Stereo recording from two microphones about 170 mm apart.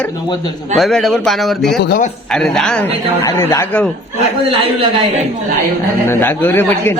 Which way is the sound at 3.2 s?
15° left (ahead or behind).